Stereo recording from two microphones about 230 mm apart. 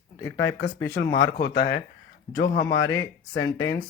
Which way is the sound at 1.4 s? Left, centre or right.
Left.